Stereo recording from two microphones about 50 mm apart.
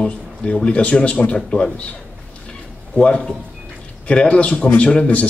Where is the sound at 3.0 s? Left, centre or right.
Left.